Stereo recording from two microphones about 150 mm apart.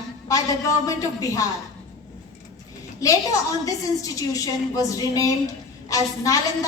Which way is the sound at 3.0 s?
20° left (ahead or behind).